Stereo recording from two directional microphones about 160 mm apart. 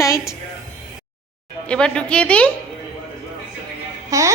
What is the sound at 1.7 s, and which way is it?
Speech, 5° left (ahead or behind).